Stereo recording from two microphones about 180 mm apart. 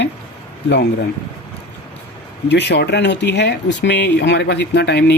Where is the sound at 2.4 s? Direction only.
70° left (ahead or behind).